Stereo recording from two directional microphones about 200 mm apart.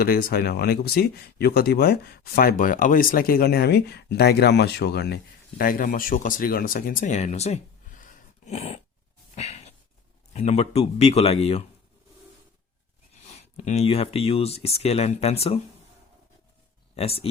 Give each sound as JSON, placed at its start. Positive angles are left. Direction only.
{"t": 0.0, "sound": "speech", "side_deg": 50}
{"t": 9.3, "sound": "a sound", "side_deg": 30}
{"t": 10.3, "sound": "speech", "side_deg": 35}
{"t": 13.2, "sound": "speech", "side_deg": 35}
{"t": 16.9, "sound": "speech", "side_deg": 30}